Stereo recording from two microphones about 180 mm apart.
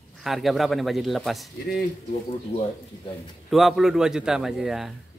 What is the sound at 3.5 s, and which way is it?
Speech, centre (ahead or behind).